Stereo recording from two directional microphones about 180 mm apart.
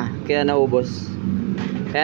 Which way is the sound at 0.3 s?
35° right (ahead or behind).